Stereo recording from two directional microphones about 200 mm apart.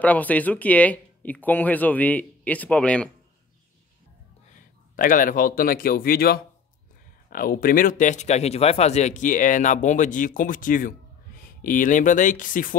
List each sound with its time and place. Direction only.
0.0 s speech: 10° left (ahead or behind)
4.6 s a man's voice: 45° left (ahead or behind)